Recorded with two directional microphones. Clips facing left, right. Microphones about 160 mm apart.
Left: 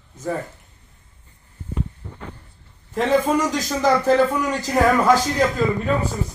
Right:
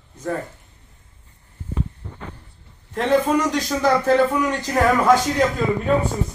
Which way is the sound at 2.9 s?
Centre (ahead or behind).